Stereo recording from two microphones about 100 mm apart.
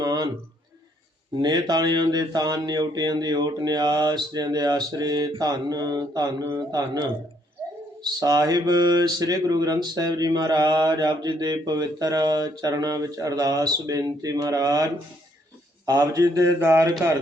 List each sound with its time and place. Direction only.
0.0 s a sound: 40° right (ahead or behind)
1.4 s speech: 45° right (ahead or behind)
8.2 s speech: 40° right (ahead or behind)
15.9 s speech: 35° right (ahead or behind)